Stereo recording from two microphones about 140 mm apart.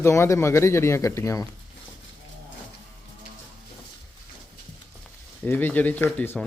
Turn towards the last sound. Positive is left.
turn(degrees=10)  # may be behind; listen again after turning